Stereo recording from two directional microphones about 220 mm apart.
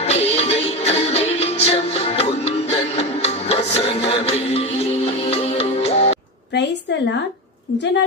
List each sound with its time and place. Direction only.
0.0 s music: 30° left (ahead or behind)